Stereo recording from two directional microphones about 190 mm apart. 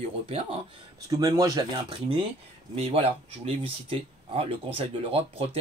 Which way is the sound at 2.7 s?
30° right (ahead or behind).